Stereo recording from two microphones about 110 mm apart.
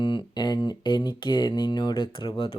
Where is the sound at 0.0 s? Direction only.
45° left (ahead or behind).